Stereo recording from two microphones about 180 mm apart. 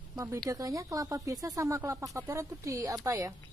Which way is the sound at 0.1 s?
15° right (ahead or behind).